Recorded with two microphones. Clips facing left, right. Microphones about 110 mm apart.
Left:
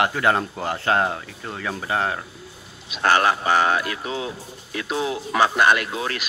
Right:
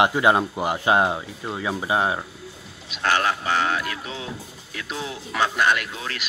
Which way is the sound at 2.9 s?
45° left (ahead or behind).